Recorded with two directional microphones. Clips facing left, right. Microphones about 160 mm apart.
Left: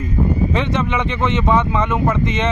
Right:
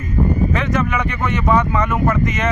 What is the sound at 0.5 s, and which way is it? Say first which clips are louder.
Speech: even; 25° left (ahead or behind).